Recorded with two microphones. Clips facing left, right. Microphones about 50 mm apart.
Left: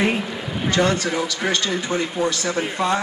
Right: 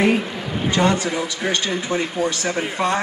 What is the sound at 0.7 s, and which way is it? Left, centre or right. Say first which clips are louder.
A man's voice: right 1 dB; centre.